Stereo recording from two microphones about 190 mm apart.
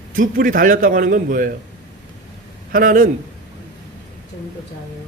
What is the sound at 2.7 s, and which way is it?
Speech, 45° right (ahead or behind).